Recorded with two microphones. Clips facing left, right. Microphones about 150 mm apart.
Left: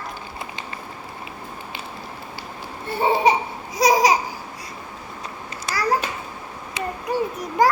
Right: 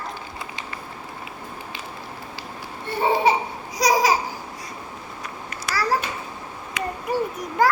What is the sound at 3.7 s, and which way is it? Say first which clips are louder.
Babbling: left 2 dB; 20° left (ahead or behind).